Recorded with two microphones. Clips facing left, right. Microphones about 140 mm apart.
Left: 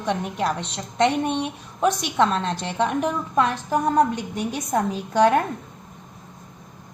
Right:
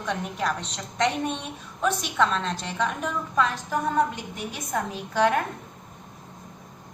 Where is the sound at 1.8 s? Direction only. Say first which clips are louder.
Left 4 dB; 40° left (ahead or behind).